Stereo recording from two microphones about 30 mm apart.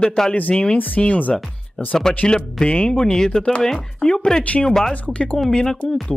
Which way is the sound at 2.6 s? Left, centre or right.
Left.